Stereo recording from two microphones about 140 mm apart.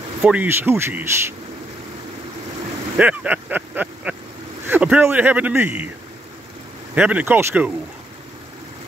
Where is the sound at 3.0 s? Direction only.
10° right (ahead or behind).